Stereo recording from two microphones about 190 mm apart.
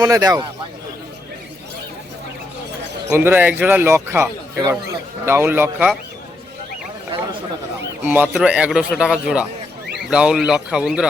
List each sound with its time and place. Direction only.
0.0 s a man's voice: 20° right (ahead or behind)
3.1 s a man's voice: 10° right (ahead or behind)
8.0 s a man's voice: 10° right (ahead or behind)